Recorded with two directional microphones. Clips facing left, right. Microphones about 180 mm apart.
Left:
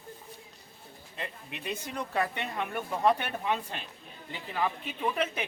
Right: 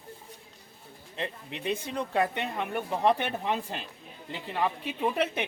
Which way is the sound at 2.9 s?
30° right (ahead or behind).